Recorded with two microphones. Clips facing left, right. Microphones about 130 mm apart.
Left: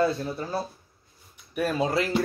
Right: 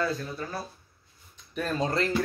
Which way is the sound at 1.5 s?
10° left (ahead or behind).